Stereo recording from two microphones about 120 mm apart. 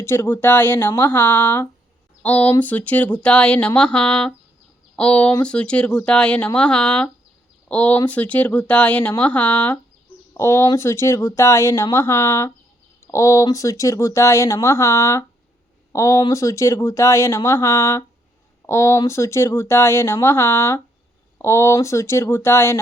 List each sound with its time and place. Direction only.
0.0 s speech: 20° left (ahead or behind)